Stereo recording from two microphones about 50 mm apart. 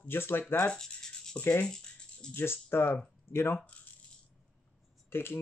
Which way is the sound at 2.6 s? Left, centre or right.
Left.